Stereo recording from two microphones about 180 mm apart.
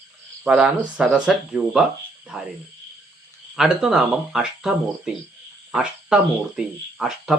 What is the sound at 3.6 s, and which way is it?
Speech, 5° right (ahead or behind).